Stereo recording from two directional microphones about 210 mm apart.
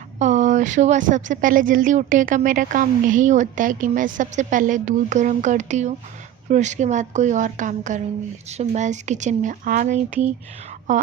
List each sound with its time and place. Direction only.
0.2 s speech: 35° right (ahead or behind)